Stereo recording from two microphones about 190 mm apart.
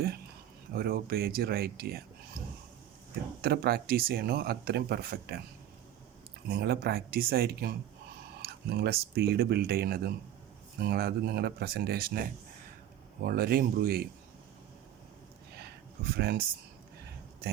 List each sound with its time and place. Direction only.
0.7 s speech: 55° right (ahead or behind)
3.4 s speech: 55° right (ahead or behind)
6.5 s speech: 55° right (ahead or behind)
15.6 s a sound: 55° right (ahead or behind)